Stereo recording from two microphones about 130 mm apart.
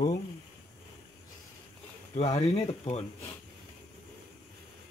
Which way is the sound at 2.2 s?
55° left (ahead or behind).